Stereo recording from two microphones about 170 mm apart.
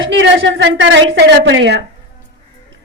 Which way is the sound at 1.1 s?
90° right.